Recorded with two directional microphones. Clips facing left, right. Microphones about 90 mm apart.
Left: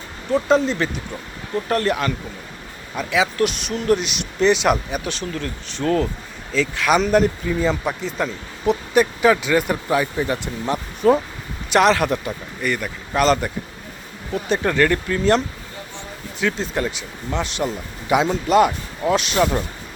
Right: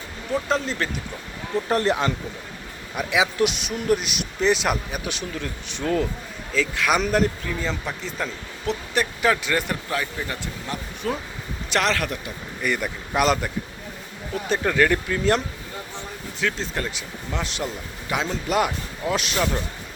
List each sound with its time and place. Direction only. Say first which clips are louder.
0.3 s speech: left 7 dB; centre (ahead or behind)
1.7 s speech: left 1 dB; 20° right (ahead or behind); by 4.9 s centre (ahead or behind)
5.0 s speech: left 3 dB; 10° right (ahead or behind)
9.9 s speech: left 9 dB; 20° left (ahead or behind)
12.6 s speech: left 1 dB; 10° right (ahead or behind)
14.5 s speech: left 2 dB; centre (ahead or behind)
16.4 s speech: left 4 dB; 5° left (ahead or behind)